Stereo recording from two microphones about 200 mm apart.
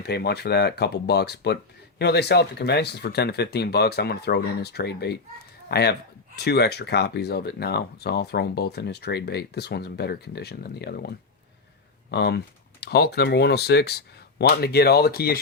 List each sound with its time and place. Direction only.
0.0 s speech: 55° left (ahead or behind)
12.1 s speech: 55° left (ahead or behind)